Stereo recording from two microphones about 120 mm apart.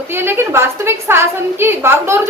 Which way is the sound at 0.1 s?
20° right (ahead or behind).